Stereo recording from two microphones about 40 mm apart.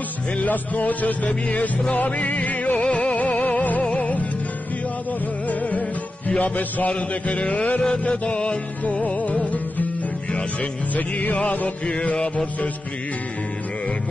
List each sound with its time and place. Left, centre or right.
0.4 s music: left
5.5 s music: left
11.0 s music: left